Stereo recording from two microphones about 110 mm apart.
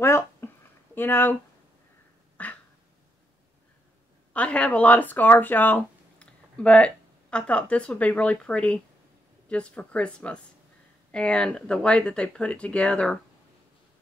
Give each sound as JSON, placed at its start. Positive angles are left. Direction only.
{"t": 0.0, "sound": "a sound", "side_deg": 25}
{"t": 0.9, "sound": "speech", "side_deg": 20}
{"t": 2.4, "sound": "duck", "side_deg": 15}
{"t": 4.3, "sound": "speech", "side_deg": 10}